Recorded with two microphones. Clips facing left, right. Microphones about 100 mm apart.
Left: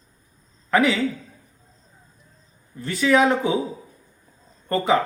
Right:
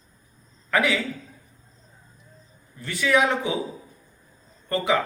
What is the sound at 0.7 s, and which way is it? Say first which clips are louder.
Speech: left 4 dB; 30° left (ahead or behind).